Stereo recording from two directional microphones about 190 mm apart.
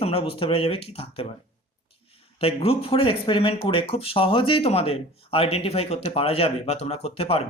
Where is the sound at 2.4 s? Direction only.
30° left (ahead or behind).